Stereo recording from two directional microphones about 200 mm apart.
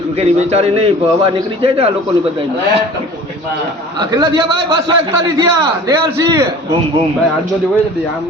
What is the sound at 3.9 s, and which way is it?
A man's voice, 20° right (ahead or behind).